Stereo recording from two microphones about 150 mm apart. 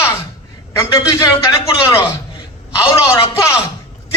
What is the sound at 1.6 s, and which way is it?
A man's voice, 20° left (ahead or behind).